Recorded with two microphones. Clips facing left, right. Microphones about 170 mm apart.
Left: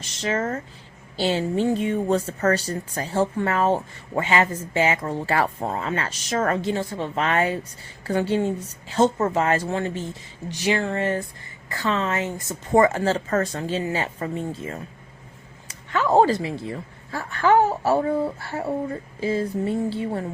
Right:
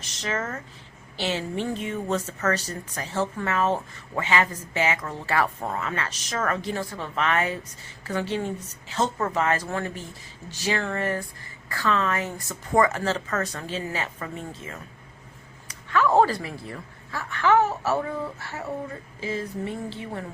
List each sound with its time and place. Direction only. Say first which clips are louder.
0.2 s a woman's voice: left 5 dB; 30° left (ahead or behind)